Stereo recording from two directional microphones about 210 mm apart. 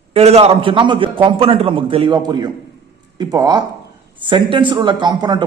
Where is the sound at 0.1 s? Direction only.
30° right (ahead or behind).